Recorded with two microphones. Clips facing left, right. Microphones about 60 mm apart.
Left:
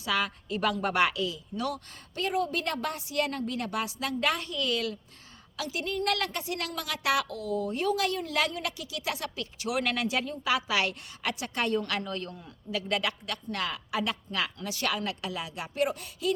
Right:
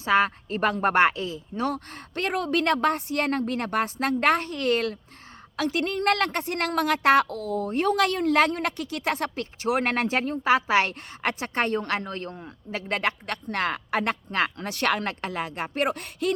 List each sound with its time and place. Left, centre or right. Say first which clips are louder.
0.0 s a woman's voice: right 8 dB; right
2.1 s a woman's voice: right 4 dB; right